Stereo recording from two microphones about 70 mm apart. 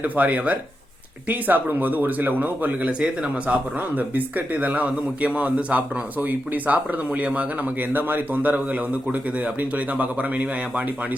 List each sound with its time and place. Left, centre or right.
0.0 s speech: right